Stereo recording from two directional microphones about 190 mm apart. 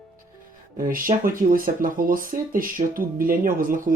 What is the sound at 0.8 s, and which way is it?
Speech, 45° right (ahead or behind).